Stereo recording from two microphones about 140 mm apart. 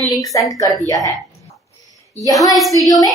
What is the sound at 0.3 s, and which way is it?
Speech, 25° left (ahead or behind).